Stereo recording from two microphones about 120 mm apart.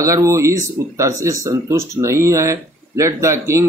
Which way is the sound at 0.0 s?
25° right (ahead or behind).